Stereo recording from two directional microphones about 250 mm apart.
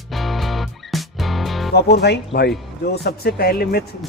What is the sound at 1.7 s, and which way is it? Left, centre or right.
Speech, left.